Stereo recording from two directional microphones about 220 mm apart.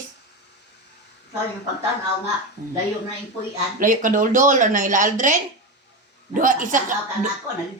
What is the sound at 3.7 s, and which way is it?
A woman's voice, 35° right (ahead or behind).